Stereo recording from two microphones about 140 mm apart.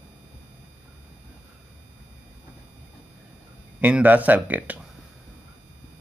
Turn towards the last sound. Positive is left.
turn(degrees=-10)  # may be behind; listen again after turning